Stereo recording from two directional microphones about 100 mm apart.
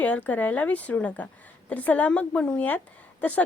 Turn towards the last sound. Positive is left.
turn(degrees=15)  # may be behind; listen again after turning